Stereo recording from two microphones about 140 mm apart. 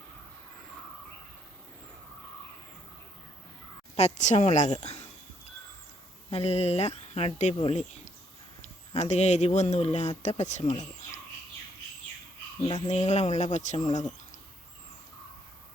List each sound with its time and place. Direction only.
3.9 s speech: 55° left (ahead or behind)
6.3 s speech: 50° left (ahead or behind)
12.7 s speech: 55° left (ahead or behind)